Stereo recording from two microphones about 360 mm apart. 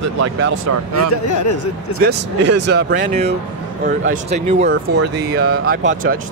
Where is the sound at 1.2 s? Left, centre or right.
Left.